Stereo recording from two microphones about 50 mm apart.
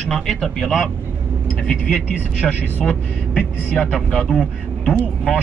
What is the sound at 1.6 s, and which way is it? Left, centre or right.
Speech, centre.